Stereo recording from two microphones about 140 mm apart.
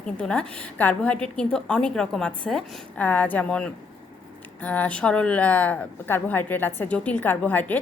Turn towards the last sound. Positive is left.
turn(degrees=10)  # may be behind; listen again after turning